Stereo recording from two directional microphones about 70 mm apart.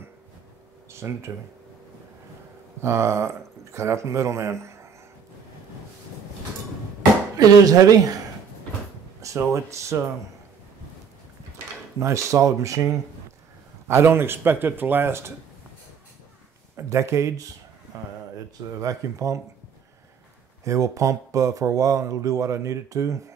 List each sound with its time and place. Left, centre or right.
0.9 s speech: right
2.8 s speech: right
7.3 s speech: right
9.4 s speech: right
12.0 s speech: right
13.8 s speech: right
16.7 s speech: right
18.8 s speech: right
20.6 s speech: right